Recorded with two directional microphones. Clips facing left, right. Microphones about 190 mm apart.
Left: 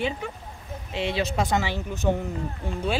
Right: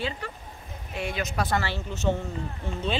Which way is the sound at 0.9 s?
25° left (ahead or behind).